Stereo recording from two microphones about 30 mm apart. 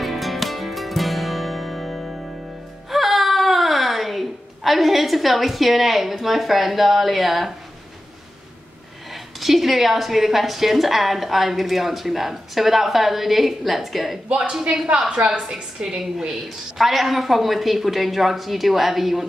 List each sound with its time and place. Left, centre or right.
0.0 s music: centre
2.9 s whimper: centre
9.1 s a woman's voice: centre
15.2 s a woman's voice: right
16.3 s a woman's voice: centre